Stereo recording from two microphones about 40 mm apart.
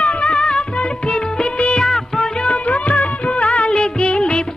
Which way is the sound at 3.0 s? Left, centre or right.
Left.